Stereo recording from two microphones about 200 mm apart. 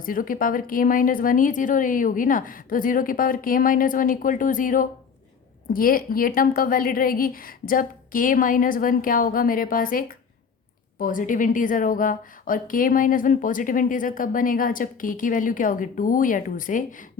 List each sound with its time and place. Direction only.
0.0 s a woman's voice: 45° left (ahead or behind)